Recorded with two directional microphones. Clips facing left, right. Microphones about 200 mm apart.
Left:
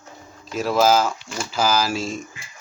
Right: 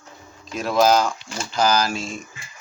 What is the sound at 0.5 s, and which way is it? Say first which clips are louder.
Speech: even; 5° left (ahead or behind).